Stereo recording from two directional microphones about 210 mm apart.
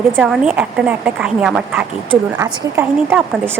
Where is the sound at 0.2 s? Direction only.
5° right (ahead or behind).